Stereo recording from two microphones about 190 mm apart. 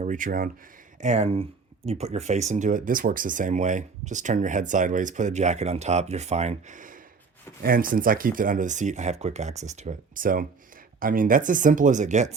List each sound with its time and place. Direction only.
0.0 s speech: 40° right (ahead or behind)